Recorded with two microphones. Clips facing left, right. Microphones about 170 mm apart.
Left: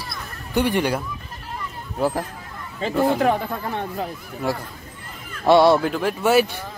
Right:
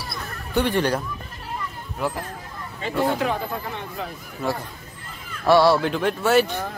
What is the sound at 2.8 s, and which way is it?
Speech, 45° left (ahead or behind).